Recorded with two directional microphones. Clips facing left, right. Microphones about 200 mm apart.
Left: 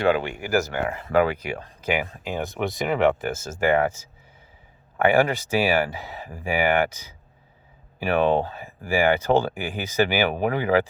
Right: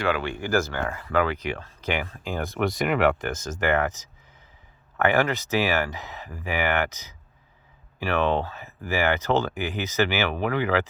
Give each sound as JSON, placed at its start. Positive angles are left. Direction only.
{"t": 0.1, "sound": "speech", "side_deg": 15}
{"t": 10.3, "sound": "speech", "side_deg": 45}